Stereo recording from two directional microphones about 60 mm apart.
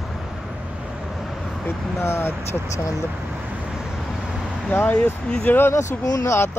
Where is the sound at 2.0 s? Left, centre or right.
Left.